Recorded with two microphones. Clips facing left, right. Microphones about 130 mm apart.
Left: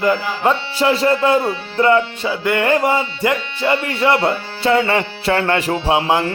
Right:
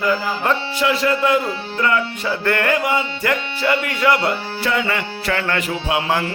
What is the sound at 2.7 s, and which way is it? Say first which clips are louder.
Music: left 5 dB; 35° left (ahead or behind).